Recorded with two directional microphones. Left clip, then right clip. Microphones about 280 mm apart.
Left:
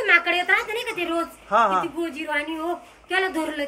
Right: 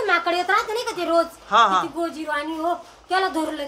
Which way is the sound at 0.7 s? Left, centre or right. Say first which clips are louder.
Right 2 dB; right.